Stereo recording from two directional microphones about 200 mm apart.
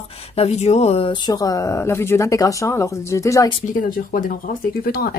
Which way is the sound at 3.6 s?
45° left (ahead or behind).